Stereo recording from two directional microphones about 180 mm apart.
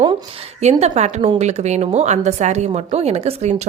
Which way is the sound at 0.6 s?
35° right (ahead or behind).